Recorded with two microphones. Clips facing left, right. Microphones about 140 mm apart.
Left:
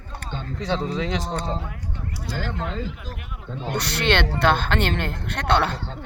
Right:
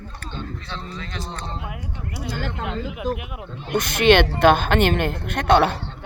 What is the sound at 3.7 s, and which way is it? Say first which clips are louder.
A woman's voice: right 7 dB; 15° right (ahead or behind).